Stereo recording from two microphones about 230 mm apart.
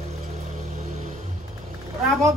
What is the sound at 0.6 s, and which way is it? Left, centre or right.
Music, right.